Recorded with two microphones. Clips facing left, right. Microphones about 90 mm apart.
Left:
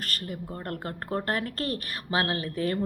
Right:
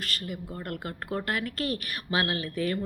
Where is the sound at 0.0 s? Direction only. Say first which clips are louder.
Even; 40° left (ahead or behind).